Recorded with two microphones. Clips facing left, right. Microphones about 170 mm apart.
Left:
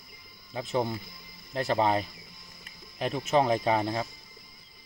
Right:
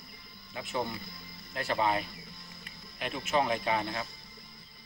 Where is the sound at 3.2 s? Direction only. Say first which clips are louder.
Left 5 dB; 40° left (ahead or behind).